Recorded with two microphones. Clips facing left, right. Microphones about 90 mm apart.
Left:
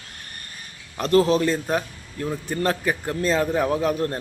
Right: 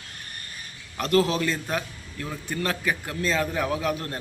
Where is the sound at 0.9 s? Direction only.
30° left (ahead or behind).